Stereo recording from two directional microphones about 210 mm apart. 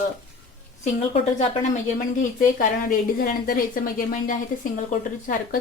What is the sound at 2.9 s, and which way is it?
A woman's voice, 45° left (ahead or behind).